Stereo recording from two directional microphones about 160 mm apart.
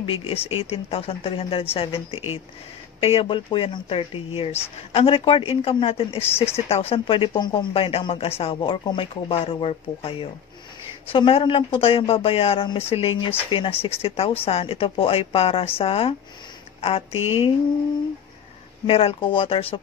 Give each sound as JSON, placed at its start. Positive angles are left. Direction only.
{"t": 0.0, "sound": "speech", "side_deg": 35}
{"t": 18.9, "sound": "speech", "side_deg": 35}